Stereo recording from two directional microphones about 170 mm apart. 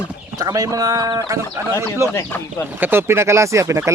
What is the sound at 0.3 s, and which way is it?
Speech, 20° right (ahead or behind).